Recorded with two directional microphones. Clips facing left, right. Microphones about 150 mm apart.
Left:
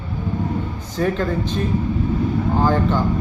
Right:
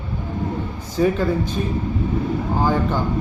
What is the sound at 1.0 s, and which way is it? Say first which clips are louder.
Speech: right 2 dB; 10° right (ahead or behind).